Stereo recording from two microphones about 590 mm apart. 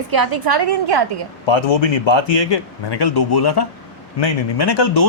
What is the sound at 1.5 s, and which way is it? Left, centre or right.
A man's voice, left.